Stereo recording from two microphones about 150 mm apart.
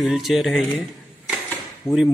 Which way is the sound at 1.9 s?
20° left (ahead or behind).